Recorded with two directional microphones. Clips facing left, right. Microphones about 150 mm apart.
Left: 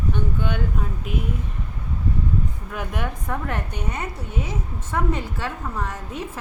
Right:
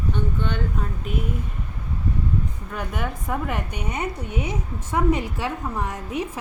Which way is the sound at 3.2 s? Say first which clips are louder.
Right 1 dB; 10° right (ahead or behind).